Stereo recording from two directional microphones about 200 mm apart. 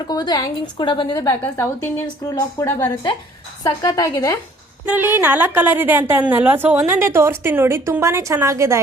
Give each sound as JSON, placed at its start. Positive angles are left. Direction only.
{"t": 0.1, "sound": "a woman's voice", "side_deg": 20}
{"t": 4.9, "sound": "a woman's voice", "side_deg": -10}